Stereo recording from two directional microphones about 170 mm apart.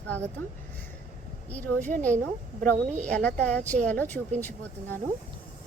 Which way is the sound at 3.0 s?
5° left (ahead or behind).